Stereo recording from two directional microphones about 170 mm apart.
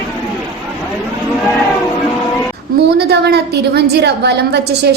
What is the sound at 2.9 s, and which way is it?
A woman's voice, 75° right (ahead or behind).